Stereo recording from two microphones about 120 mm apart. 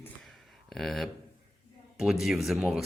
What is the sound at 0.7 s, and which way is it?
A man's voice, centre (ahead or behind).